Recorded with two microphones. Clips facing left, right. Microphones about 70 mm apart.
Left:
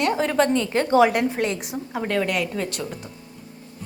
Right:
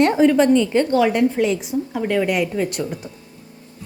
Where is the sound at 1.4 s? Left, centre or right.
Left.